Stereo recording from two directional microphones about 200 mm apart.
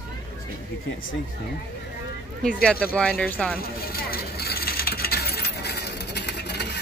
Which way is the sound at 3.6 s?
50° left (ahead or behind).